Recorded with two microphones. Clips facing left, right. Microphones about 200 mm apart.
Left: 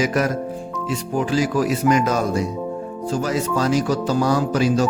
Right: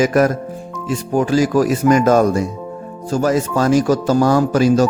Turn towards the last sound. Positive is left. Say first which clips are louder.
# right 5 dB
turn(degrees=-45)  # may be behind; listen again after turning